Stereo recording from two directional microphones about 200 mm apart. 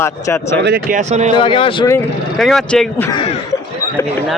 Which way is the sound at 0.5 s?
55° right (ahead or behind).